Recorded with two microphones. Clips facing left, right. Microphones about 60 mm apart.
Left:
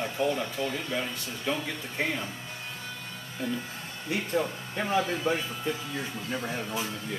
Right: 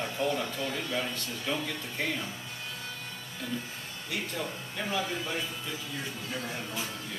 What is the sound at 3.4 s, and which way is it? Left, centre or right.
Speech, left.